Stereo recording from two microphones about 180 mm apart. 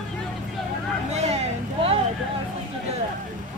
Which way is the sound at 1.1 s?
35° right (ahead or behind).